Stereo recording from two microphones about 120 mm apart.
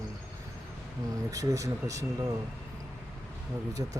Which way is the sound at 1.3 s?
25° right (ahead or behind).